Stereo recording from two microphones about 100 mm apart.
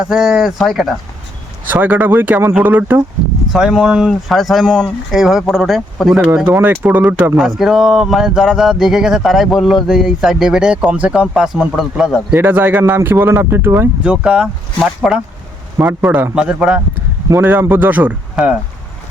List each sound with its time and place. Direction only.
0.0 s speech: 5° right (ahead or behind)
1.7 s speech: 20° right (ahead or behind)
3.5 s speech: 5° right (ahead or behind)
6.3 s speech: 15° right (ahead or behind)
7.3 s speech: 5° right (ahead or behind)
12.3 s speech: 20° right (ahead or behind)
14.0 s speech: 10° right (ahead or behind)
15.8 s speech: 15° right (ahead or behind)
18.4 s speech: 5° right (ahead or behind)